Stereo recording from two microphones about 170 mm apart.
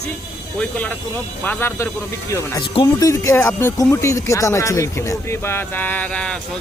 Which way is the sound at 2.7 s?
25° left (ahead or behind).